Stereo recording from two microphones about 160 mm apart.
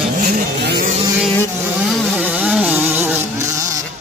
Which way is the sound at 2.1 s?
10° right (ahead or behind).